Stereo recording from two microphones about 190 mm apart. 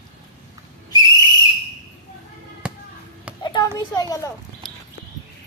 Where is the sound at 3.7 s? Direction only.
20° left (ahead or behind).